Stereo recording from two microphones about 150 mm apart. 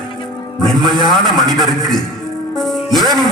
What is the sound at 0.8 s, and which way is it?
Speech, 30° right (ahead or behind).